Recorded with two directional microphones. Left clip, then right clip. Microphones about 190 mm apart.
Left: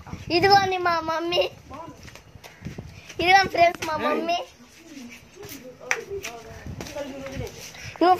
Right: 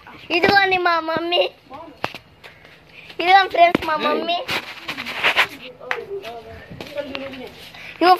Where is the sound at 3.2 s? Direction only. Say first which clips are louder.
Right 4 dB; 5° right (ahead or behind).